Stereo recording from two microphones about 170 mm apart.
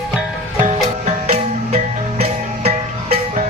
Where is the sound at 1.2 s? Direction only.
35° right (ahead or behind).